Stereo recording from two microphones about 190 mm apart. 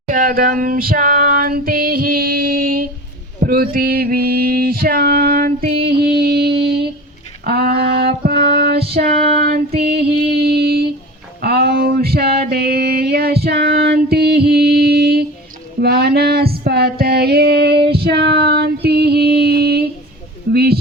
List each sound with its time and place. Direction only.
0.1 s female singing: 45° right (ahead or behind)
3.4 s a sound: 50° right (ahead or behind)
7.4 s female singing: 55° right (ahead or behind)
9.3 s child singing: 50° right (ahead or behind)
9.9 s music: 55° right (ahead or behind)
11.3 s a sound: 55° right (ahead or behind)